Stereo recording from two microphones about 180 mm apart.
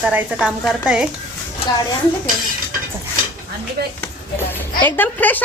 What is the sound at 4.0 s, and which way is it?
Speech, 10° left (ahead or behind).